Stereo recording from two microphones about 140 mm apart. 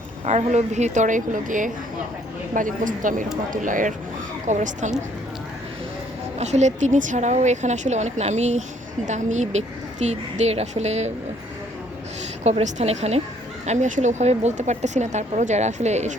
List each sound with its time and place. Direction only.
0.3 s speech: 55° right (ahead or behind)
6.4 s a woman's voice: 55° right (ahead or behind)
12.4 s a woman's voice: 55° right (ahead or behind)
13.7 s speech: 60° right (ahead or behind)